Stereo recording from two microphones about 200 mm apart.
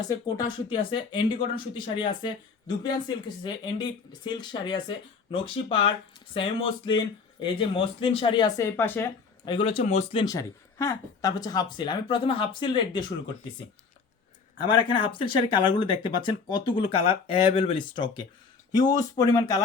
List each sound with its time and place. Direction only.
0.1 s speech: 20° left (ahead or behind)
9.5 s speech: 25° left (ahead or behind)
14.7 s speech: 25° left (ahead or behind)